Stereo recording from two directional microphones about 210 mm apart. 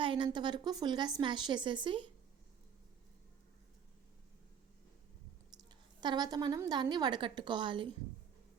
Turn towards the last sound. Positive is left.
turn(degrees=-25)  # may be behind; listen again after turning